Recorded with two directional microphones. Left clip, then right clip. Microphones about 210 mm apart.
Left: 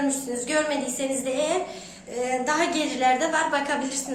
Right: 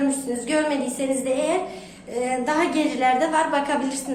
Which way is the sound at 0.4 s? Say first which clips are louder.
Right 2 dB; 5° left (ahead or behind).